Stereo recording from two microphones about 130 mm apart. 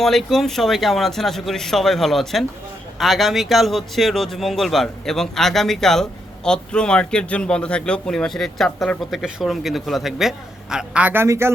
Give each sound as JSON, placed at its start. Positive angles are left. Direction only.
{"t": 0.0, "sound": "speech", "side_deg": 0}